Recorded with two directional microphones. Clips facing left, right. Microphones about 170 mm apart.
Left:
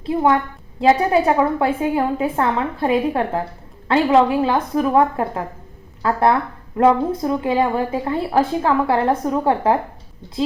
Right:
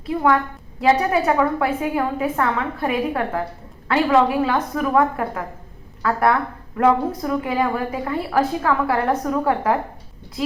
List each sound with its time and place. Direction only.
0.0 s a woman's voice: 25° left (ahead or behind)